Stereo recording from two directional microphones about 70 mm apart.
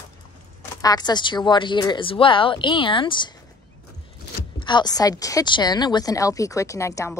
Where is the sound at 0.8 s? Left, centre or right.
Left.